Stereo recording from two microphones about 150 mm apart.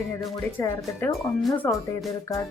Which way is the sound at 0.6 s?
15° left (ahead or behind).